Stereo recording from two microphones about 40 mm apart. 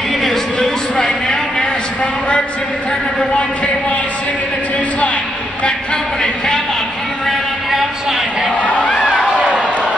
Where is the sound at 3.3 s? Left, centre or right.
Left.